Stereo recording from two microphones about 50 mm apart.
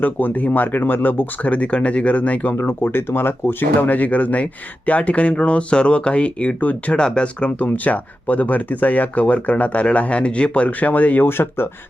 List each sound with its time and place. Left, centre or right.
0.0 s speech: left
1.5 s speech: left
2.5 s speech: left
6.9 s speech: centre; by 11.3 s left
11.3 s speech: left